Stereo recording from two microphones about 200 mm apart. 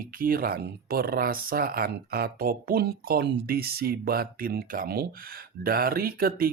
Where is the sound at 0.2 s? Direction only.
45° right (ahead or behind).